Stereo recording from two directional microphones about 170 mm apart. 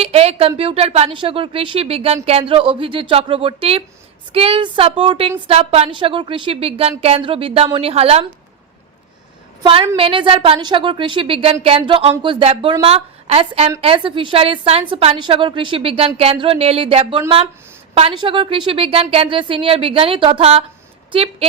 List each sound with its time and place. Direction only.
0.0 s a woman's voice: 35° right (ahead or behind)
10.0 s a woman's voice: 30° right (ahead or behind)